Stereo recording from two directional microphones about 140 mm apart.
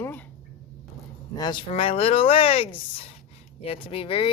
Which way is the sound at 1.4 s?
35° left (ahead or behind).